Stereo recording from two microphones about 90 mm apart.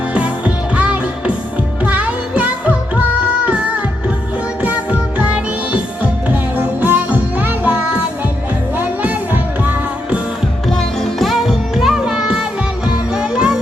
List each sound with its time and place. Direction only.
0.1 s music: 15° right (ahead or behind)
4.6 s music: 15° right (ahead or behind)
10.7 s music: 5° left (ahead or behind)